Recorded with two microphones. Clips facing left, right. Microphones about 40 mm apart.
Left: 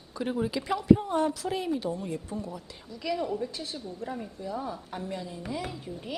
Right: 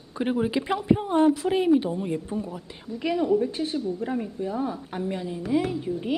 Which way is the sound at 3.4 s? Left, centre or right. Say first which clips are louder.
Right 9 dB; right.